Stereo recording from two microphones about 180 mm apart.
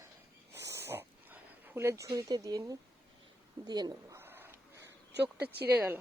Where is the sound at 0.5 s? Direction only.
15° right (ahead or behind).